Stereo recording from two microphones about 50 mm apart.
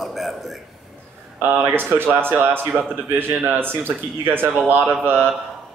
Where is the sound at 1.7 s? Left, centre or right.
Right.